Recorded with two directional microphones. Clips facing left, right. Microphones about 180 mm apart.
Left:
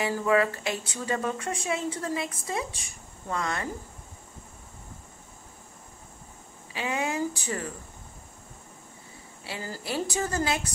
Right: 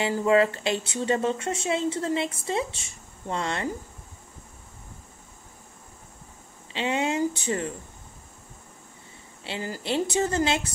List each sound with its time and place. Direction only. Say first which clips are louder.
0.0 s speech: right 3 dB; 25° right (ahead or behind)
6.7 s speech: right 4 dB; 25° right (ahead or behind)
9.4 s speech: right 4 dB; 25° right (ahead or behind)